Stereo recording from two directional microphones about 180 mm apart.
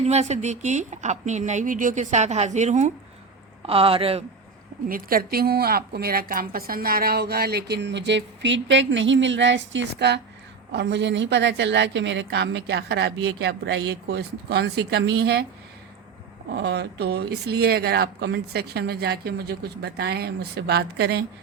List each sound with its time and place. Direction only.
0.0 s a woman's voice: 40° right (ahead or behind)
4.9 s a woman's voice: 50° right (ahead or behind)
16.6 s a woman's voice: 65° right (ahead or behind)